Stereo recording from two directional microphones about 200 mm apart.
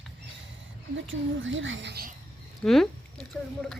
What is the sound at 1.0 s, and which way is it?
A woman's voice, 70° right (ahead or behind).